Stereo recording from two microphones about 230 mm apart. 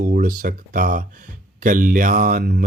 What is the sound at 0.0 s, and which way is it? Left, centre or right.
Mantra, right.